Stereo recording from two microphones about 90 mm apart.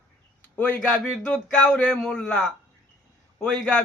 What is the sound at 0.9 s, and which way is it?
A man's voice, 5° left (ahead or behind).